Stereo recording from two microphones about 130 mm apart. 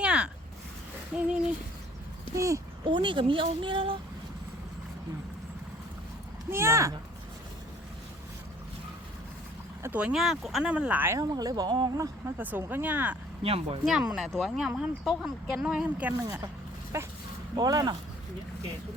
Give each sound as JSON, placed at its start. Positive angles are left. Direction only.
{"t": 0.0, "sound": "a sound", "side_deg": -10}
{"t": 2.3, "sound": "speech", "side_deg": -25}
{"t": 2.8, "sound": "speech", "side_deg": -40}
{"t": 6.5, "sound": "speech", "side_deg": -20}
{"t": 9.8, "sound": "speech", "side_deg": -10}
{"t": 11.2, "sound": "speech", "side_deg": -30}
{"t": 12.4, "sound": "speech", "side_deg": -15}
{"t": 13.4, "sound": "speech", "side_deg": -45}
{"t": 13.8, "sound": "speech", "side_deg": -5}
{"t": 16.9, "sound": "speech", "side_deg": -25}